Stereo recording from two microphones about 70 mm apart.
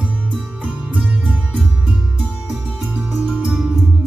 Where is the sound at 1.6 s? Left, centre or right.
Centre.